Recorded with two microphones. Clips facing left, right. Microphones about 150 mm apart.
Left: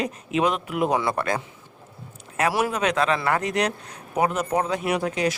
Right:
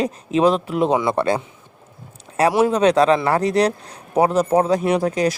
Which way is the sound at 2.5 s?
30° right (ahead or behind).